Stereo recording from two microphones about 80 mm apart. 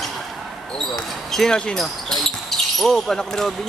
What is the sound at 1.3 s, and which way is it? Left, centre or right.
Speech, centre.